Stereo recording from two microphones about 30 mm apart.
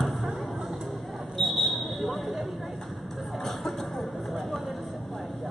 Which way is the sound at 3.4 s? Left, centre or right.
Centre.